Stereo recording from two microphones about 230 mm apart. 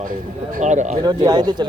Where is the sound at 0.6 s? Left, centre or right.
Right.